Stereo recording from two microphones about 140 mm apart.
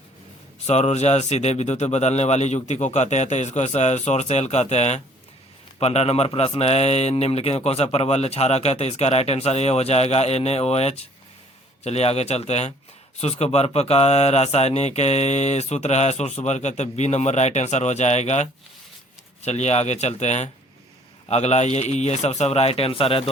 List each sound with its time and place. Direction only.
0.7 s speech: 55° left (ahead or behind)